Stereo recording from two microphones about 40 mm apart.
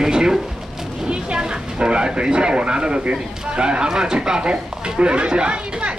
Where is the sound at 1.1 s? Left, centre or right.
Right.